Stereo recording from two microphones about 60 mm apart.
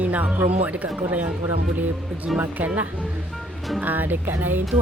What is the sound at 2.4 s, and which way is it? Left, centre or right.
Music, right.